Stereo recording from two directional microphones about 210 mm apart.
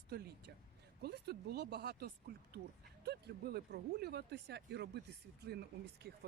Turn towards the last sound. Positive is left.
turn(degrees=-50)  # may be behind; listen again after turning